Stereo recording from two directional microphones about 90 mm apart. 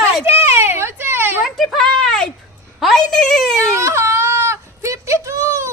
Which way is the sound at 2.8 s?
5° left (ahead or behind).